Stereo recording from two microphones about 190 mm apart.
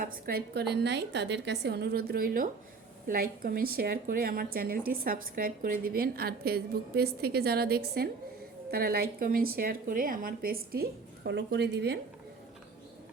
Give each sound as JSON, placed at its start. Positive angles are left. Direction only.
{"t": 0.0, "sound": "a woman's voice", "side_deg": -50}